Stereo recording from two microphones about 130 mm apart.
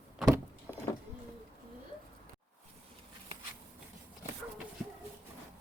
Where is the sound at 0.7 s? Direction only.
15° left (ahead or behind).